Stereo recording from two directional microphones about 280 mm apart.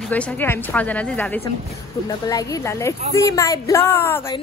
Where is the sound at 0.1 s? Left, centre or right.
Centre.